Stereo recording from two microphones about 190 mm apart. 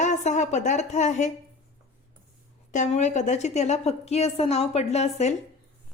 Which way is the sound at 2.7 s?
40° left (ahead or behind).